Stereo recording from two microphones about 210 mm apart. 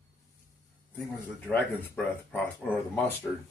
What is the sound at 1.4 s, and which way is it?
Speech, 10° left (ahead or behind).